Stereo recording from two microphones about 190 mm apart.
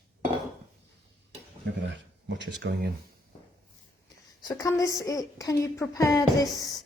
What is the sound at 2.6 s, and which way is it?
Speech, 70° right (ahead or behind).